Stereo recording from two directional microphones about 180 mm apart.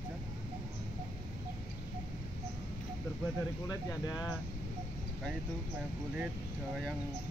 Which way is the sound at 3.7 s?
20° left (ahead or behind).